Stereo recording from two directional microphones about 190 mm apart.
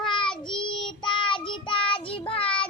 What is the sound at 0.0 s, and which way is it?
Child singing, 25° left (ahead or behind).